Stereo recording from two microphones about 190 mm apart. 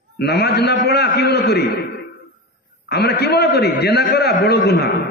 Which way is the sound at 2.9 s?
60° left (ahead or behind).